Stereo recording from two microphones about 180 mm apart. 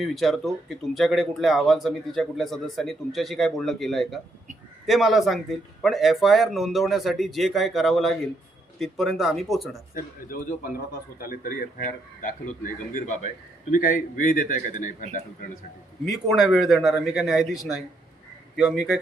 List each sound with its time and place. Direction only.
0.0 s speech: centre (ahead or behind)
9.9 s a man's voice: 50° left (ahead or behind)
16.3 s speech: centre (ahead or behind)